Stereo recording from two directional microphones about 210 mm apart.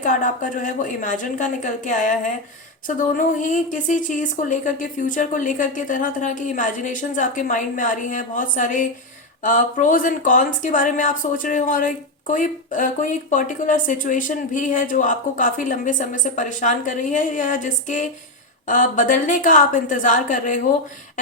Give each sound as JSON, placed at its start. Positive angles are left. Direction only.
{"t": 0.0, "sound": "speech", "side_deg": 40}